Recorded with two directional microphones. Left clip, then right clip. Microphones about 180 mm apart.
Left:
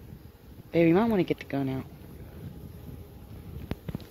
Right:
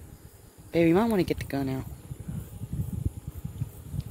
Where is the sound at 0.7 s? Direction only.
20° right (ahead or behind).